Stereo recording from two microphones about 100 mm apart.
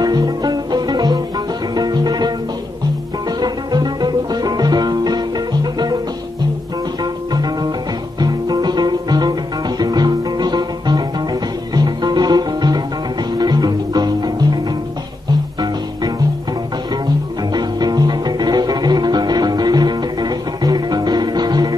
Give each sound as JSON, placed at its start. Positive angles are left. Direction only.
{"t": 0.0, "sound": "music", "side_deg": -45}
{"t": 3.3, "sound": "music", "side_deg": -45}
{"t": 8.2, "sound": "music", "side_deg": -40}
{"t": 17.6, "sound": "music", "side_deg": -40}